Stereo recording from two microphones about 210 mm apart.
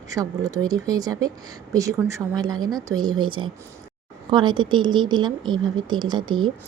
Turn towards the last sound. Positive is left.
turn(degrees=-20)  # may be behind; listen again after turning